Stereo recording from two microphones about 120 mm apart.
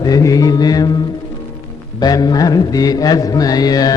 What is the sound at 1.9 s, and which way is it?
Mantra, 35° left (ahead or behind).